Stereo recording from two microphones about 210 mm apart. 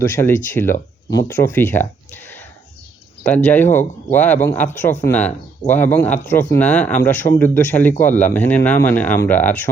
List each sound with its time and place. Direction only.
0.1 s speech: 10° left (ahead or behind)